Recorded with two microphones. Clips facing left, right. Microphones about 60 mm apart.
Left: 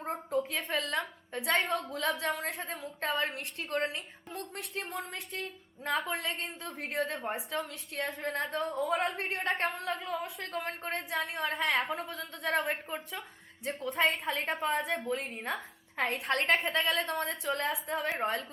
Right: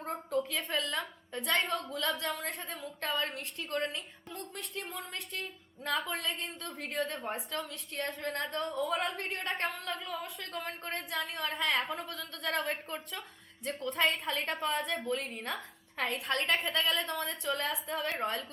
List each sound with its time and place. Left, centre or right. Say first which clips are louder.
0.0 s a sound: left 1 dB; centre
1.5 s a woman's voice: left 2 dB; centre; by 4.9 s left
5.4 s a woman's voice: left 2 dB; left
7.2 s a woman's voice: left 2 dB; centre
7.5 s a woman's voice: left 2 dB; left
16.2 s a woman's voice: left 3 dB; left
16.6 s a woman's voice: left 2 dB; left